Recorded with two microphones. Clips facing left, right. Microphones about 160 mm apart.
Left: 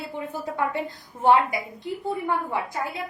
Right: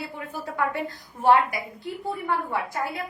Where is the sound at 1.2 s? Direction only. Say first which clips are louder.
Even; 20° left (ahead or behind).